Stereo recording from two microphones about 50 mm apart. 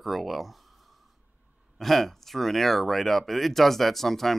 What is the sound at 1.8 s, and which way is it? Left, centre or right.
Speech, centre.